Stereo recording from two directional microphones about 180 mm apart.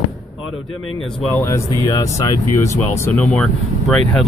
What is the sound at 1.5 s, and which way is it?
Speech, 20° left (ahead or behind).